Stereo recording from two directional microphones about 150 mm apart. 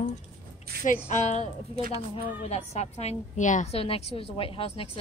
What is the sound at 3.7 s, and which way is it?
A woman's voice, 40° left (ahead or behind).